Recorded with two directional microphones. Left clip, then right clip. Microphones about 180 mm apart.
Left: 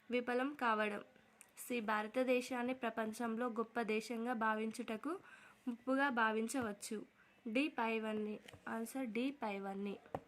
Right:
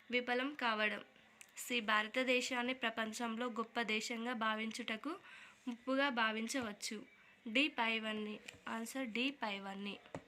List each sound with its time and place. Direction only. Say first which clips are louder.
0.1 s a woman's voice: right 1 dB; 55° left (ahead or behind)